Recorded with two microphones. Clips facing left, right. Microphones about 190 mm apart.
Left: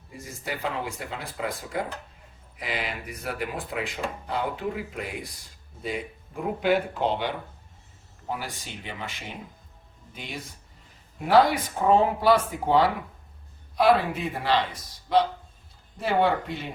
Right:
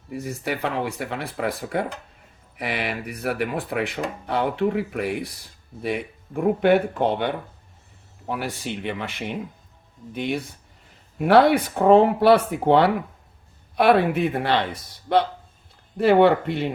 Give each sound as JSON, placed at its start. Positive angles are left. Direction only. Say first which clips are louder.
{"t": 0.1, "sound": "speech", "louder": "right 7 dB", "side_deg": -65}